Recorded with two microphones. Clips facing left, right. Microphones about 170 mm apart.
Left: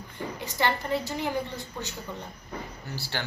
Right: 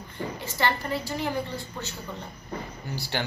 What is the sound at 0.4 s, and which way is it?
Speech, 15° left (ahead or behind).